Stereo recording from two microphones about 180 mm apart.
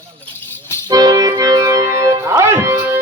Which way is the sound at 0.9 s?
20° right (ahead or behind).